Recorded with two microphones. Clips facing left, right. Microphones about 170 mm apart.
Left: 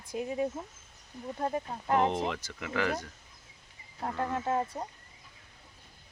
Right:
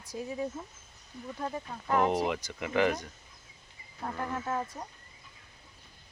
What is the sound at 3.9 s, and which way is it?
Speech, 25° left (ahead or behind).